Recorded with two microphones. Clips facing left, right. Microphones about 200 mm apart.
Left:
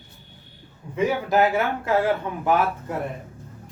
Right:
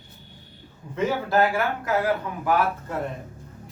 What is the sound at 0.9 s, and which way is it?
Speech, 15° left (ahead or behind).